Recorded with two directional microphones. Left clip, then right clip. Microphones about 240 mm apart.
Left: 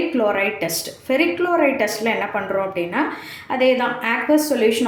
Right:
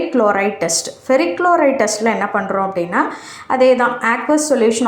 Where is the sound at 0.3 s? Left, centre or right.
Centre.